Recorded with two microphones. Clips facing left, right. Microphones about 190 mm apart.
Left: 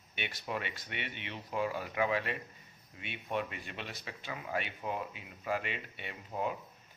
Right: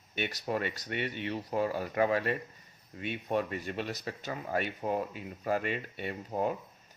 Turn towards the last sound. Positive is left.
turn(degrees=-45)  # may be behind; listen again after turning